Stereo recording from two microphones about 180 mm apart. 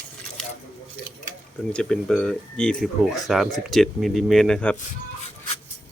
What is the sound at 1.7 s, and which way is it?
Speech, 5° left (ahead or behind).